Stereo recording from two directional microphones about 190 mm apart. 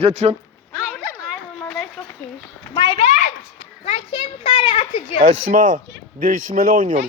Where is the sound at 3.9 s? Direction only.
30° left (ahead or behind).